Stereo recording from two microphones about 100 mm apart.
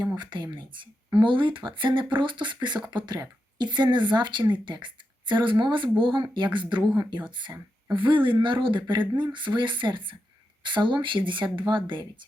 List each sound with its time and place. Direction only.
0.2 s speech: 50° right (ahead or behind)